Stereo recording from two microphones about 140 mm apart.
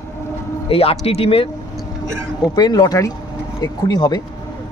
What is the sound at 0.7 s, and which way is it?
Speech, 45° left (ahead or behind).